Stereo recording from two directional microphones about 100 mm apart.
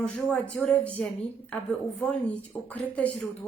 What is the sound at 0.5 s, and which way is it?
Speech, 10° left (ahead or behind).